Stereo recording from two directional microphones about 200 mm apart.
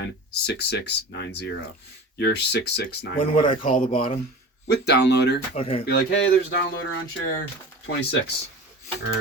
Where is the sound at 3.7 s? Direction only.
40° left (ahead or behind).